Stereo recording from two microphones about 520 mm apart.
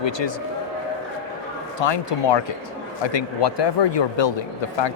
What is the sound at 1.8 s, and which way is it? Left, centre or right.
Speech, left.